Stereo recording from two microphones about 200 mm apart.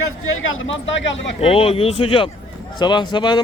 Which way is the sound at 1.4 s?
30° left (ahead or behind).